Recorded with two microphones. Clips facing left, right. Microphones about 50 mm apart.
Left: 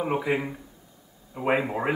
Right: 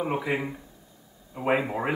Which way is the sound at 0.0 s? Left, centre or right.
Centre.